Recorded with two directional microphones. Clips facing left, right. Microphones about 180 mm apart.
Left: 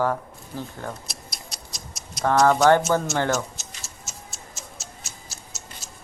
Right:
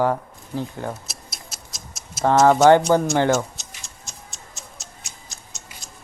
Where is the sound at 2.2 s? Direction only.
20° right (ahead or behind).